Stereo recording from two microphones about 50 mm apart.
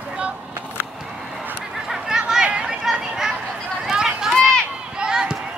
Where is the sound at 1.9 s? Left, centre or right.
Centre.